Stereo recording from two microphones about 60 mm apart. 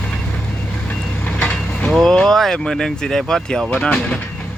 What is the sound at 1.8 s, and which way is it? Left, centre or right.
Speech, centre.